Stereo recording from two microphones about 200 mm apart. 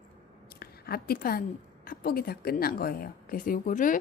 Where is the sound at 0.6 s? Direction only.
50° left (ahead or behind).